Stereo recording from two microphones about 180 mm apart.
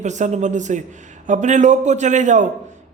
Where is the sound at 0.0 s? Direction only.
40° right (ahead or behind).